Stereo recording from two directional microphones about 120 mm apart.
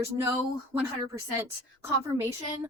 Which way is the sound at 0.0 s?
25° right (ahead or behind).